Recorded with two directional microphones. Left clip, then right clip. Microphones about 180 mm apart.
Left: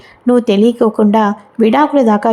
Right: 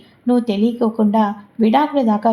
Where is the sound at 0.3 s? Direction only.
35° left (ahead or behind).